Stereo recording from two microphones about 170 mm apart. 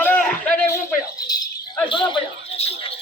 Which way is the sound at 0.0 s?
10° left (ahead or behind).